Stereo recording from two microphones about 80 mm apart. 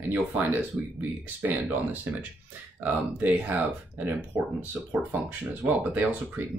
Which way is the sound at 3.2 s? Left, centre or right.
Centre.